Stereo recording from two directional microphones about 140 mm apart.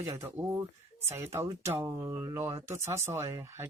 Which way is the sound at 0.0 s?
20° right (ahead or behind).